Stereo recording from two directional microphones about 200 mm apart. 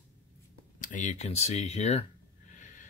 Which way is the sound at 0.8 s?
40° left (ahead or behind).